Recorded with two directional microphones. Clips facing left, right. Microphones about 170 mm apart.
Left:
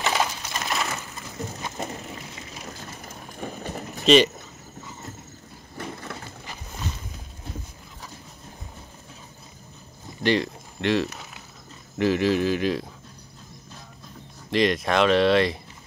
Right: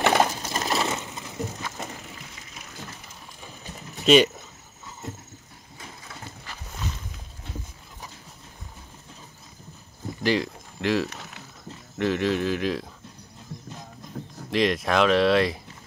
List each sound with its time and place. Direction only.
0.0 s pigeon: 50° right (ahead or behind)
0.4 s a sound: 35° right (ahead or behind)
0.8 s pigeon: 20° right (ahead or behind)
2.5 s train: 35° left (ahead or behind)
3.3 s horse: 55° left (ahead or behind)
4.0 s speech: 5° right (ahead or behind)
5.8 s crushing: 60° left (ahead or behind)
10.2 s speech: centre (ahead or behind)
14.5 s speech: centre (ahead or behind)